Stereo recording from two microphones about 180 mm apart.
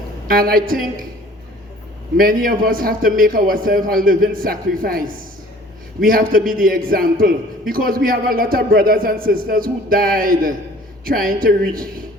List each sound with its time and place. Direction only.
0.3 s a man's voice: 55° right (ahead or behind)
2.1 s a man's voice: 50° right (ahead or behind)